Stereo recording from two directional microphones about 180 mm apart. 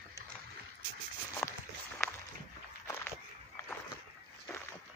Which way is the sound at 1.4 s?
15° left (ahead or behind).